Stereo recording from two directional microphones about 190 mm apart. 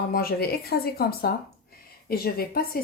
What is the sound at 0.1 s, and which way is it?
Speech, 50° left (ahead or behind).